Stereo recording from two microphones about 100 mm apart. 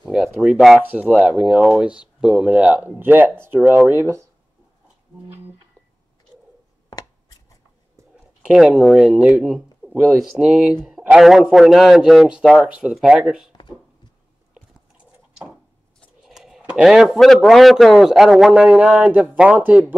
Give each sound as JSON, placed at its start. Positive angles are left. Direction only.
{"t": 0.0, "sound": "speech", "side_deg": -5}
{"t": 0.8, "sound": "speech", "side_deg": -15}
{"t": 3.9, "sound": "speech", "side_deg": -25}
{"t": 8.5, "sound": "speech", "side_deg": -10}
{"t": 13.5, "sound": "a sound", "side_deg": 50}
{"t": 16.2, "sound": "speech", "side_deg": -5}